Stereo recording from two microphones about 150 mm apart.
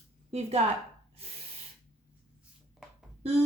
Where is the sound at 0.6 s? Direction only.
50° right (ahead or behind).